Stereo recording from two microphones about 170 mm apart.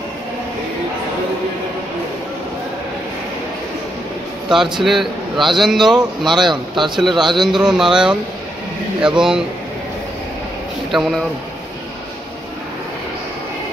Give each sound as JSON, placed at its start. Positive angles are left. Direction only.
{"t": 4.5, "sound": "a man's voice", "side_deg": 0}
{"t": 6.5, "sound": "a man's voice", "side_deg": -30}
{"t": 7.0, "sound": "a man's voice", "side_deg": 0}
{"t": 10.9, "sound": "a man's voice", "side_deg": 0}